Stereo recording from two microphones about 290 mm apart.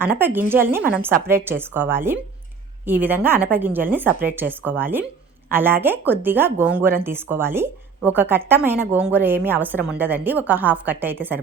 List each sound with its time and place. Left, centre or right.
0.0 s a woman's voice: centre